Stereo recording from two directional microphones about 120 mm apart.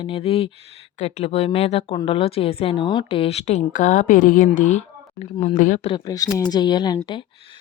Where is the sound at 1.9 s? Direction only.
50° left (ahead or behind); by 5.8 s 90° left.